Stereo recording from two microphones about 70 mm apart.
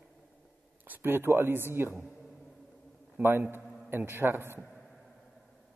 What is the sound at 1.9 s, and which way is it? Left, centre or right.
Speech, centre.